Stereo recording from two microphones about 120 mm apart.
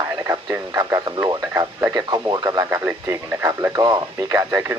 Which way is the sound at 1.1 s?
20° right (ahead or behind).